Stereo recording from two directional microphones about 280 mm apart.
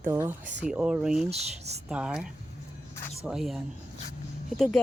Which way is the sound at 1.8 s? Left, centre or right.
Centre.